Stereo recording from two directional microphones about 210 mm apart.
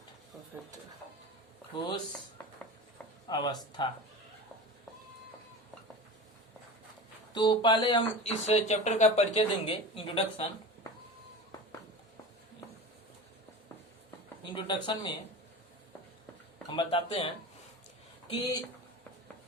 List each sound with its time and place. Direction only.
1.7 s speech: 20° left (ahead or behind)
3.2 s speech: 20° left (ahead or behind)
7.3 s speech: 20° left (ahead or behind)
14.4 s speech: 20° left (ahead or behind)
16.6 s speech: 25° left (ahead or behind)